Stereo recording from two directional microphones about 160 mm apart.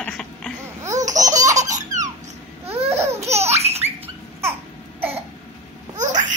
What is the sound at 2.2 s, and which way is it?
Babbling, 40° right (ahead or behind).